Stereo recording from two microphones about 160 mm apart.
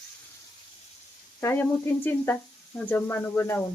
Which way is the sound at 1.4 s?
15° left (ahead or behind).